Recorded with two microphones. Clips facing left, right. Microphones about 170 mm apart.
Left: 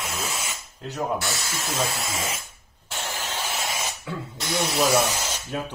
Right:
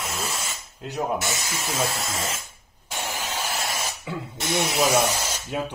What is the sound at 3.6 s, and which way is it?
Spray, centre (ahead or behind).